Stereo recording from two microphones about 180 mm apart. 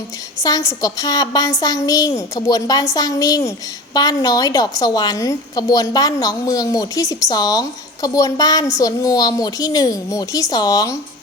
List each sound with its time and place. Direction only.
0.4 s a woman's voice: 20° left (ahead or behind)